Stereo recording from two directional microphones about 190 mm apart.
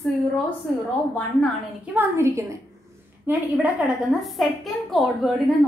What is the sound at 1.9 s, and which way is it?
Speech, 10° right (ahead or behind).